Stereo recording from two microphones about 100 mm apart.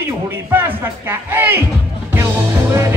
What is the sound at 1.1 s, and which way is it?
Music, 20° right (ahead or behind).